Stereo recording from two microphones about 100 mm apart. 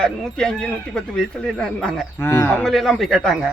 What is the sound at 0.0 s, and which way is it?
Speech, 10° left (ahead or behind).